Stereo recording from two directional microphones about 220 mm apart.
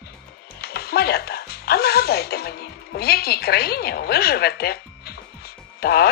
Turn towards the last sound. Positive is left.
turn(degrees=45)  # may be behind; listen again after turning